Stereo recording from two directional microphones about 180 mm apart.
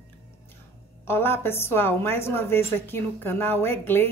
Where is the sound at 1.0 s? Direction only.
10° left (ahead or behind).